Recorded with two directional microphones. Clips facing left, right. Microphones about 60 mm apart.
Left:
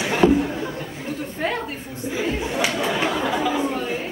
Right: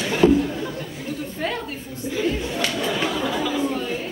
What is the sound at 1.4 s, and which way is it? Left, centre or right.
Speech, left.